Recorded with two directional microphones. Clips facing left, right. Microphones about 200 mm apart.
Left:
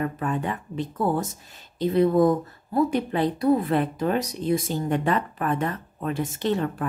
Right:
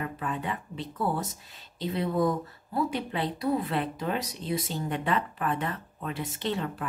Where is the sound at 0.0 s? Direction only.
45° left (ahead or behind).